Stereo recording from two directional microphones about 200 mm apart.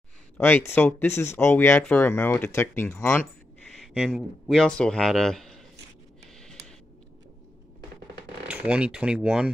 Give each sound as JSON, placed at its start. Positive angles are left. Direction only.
{"t": 0.4, "sound": "speech", "side_deg": 10}
{"t": 3.8, "sound": "speech", "side_deg": 0}
{"t": 8.5, "sound": "speech", "side_deg": -5}